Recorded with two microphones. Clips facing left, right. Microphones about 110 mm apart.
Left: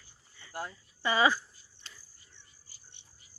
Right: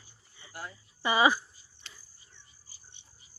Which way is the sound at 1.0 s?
15° right (ahead or behind).